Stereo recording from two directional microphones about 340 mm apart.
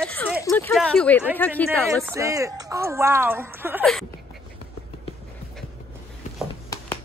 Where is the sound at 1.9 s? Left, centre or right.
Centre.